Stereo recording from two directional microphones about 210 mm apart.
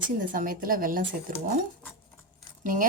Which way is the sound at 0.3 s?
40° right (ahead or behind).